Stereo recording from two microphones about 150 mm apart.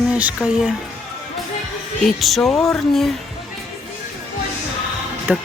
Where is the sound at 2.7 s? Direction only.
Centre (ahead or behind).